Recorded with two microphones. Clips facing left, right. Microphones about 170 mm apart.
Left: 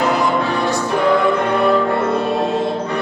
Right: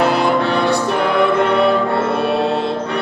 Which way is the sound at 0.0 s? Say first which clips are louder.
Right 2 dB; 65° right (ahead or behind).